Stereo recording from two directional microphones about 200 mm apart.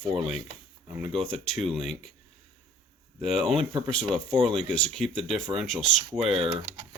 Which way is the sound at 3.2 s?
Centre (ahead or behind).